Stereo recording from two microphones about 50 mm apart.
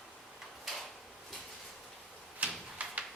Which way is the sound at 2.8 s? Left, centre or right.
Right.